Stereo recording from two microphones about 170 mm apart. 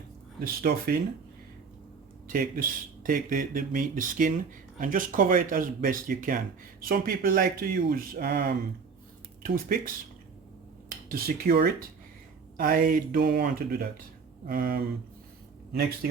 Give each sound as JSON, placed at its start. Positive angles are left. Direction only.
{"t": 0.3, "sound": "speech", "side_deg": -60}
{"t": 2.2, "sound": "speech", "side_deg": -55}
{"t": 11.1, "sound": "speech", "side_deg": -60}